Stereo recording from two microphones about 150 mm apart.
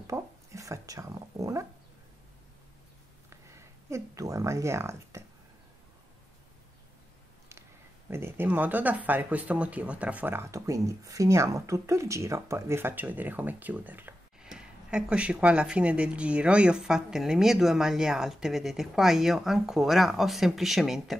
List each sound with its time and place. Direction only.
0.0 s speech: 20° right (ahead or behind)
3.3 s speech: 20° right (ahead or behind)
8.1 s speech: 15° right (ahead or behind)